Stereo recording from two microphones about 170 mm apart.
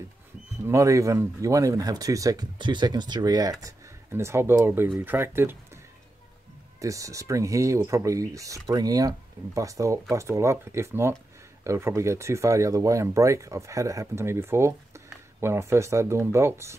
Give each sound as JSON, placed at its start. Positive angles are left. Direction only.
{"t": 0.7, "sound": "speech", "side_deg": -20}
{"t": 6.8, "sound": "speech", "side_deg": -20}